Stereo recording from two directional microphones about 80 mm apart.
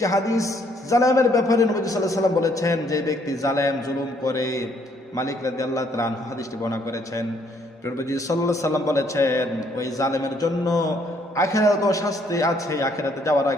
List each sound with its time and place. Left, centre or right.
0.0 s a man's voice: left